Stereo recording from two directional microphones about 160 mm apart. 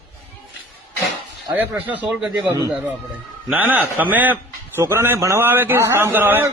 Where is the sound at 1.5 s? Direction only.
10° right (ahead or behind).